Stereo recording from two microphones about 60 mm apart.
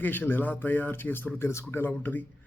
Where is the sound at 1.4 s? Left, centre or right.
Left.